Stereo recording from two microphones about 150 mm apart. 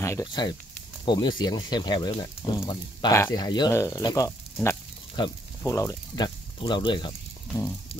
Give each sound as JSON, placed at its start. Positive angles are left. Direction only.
{"t": 0.0, "sound": "snake", "side_deg": 20}
{"t": 0.3, "sound": "speech", "side_deg": 30}